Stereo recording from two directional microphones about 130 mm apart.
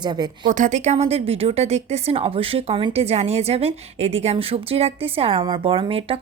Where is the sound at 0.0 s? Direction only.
35° right (ahead or behind).